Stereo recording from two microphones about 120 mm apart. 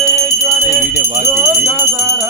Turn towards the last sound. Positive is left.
turn(degrees=-15)  # may be behind; listen again after turning